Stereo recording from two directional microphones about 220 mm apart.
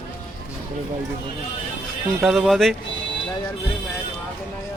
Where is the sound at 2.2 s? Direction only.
Centre (ahead or behind).